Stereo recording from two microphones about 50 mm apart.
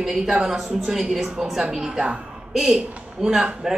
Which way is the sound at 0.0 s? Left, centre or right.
Centre.